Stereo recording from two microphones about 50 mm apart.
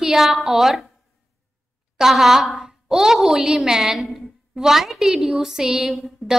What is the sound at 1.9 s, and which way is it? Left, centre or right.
A woman's voice, centre.